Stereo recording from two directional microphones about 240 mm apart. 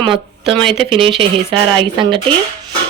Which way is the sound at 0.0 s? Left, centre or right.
Right.